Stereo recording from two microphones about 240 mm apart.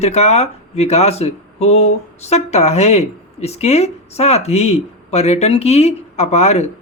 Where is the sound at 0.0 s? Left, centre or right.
Left.